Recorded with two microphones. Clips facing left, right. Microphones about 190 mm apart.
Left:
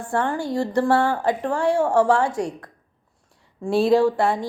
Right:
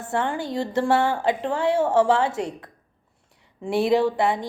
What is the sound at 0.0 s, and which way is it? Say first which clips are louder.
A woman's voice: left 2 dB; 20° right (ahead or behind).